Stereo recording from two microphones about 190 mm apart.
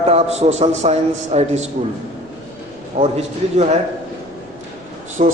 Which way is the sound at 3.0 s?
35° right (ahead or behind).